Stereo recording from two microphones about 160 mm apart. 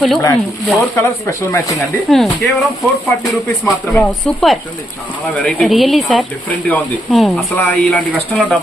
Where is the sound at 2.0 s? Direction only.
Centre (ahead or behind).